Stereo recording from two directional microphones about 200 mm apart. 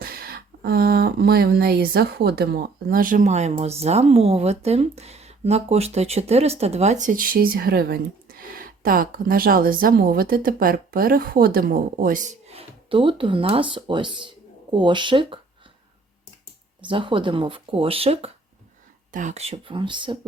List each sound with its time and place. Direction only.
0.0 s speech: 50° right (ahead or behind); by 15.4 s 25° right (ahead or behind)
16.8 s speech: 25° right (ahead or behind)